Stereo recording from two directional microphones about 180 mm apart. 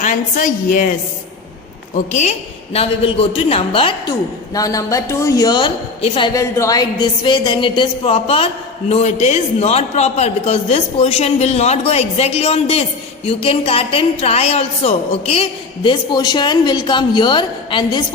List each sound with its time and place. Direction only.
0.0 s a woman's voice: 45° left (ahead or behind)
2.7 s a man's voice: 35° left (ahead or behind)
4.5 s a woman's voice: 20° left (ahead or behind)